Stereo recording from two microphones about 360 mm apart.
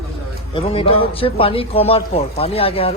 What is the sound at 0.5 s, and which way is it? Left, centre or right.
Speech, centre.